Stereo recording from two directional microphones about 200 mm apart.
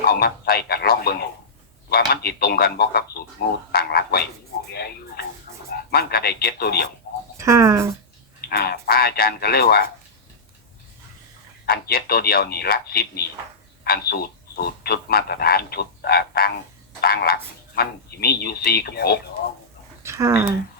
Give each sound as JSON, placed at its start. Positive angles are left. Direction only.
{"t": 0.1, "sound": "speech", "side_deg": 50}
{"t": 7.3, "sound": "speech", "side_deg": -15}
{"t": 8.4, "sound": "speech", "side_deg": 50}
{"t": 11.6, "sound": "speech", "side_deg": 50}
{"t": 20.0, "sound": "a sound", "side_deg": -15}